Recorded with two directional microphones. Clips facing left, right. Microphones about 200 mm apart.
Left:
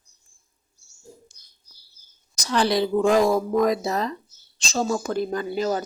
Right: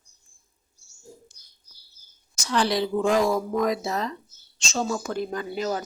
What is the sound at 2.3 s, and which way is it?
Speech, 40° left (ahead or behind).